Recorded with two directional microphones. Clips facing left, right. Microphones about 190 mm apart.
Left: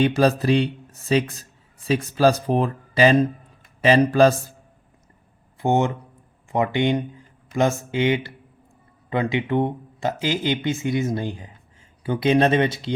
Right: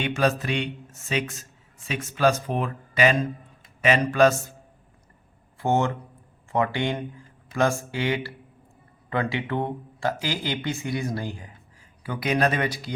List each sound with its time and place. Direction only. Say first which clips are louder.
0.0 s speech: left 6 dB; 35° left (ahead or behind)
5.5 s speech: left 3 dB; 15° left (ahead or behind)